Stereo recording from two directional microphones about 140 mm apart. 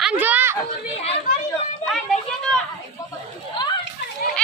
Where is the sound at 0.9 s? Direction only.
45° left (ahead or behind).